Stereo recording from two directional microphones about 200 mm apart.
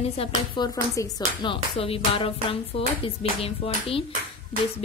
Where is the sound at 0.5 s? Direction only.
20° left (ahead or behind).